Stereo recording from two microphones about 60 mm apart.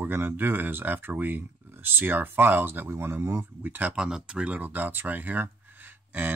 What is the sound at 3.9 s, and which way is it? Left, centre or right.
Speech, centre.